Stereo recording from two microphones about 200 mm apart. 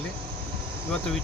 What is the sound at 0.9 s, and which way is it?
Speech, 5° left (ahead or behind).